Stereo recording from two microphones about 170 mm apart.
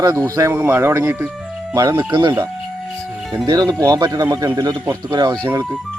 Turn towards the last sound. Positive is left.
turn(degrees=-20)  # may be behind; listen again after turning